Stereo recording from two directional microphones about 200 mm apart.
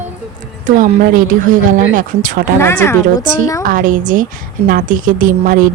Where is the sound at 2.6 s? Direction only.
10° left (ahead or behind).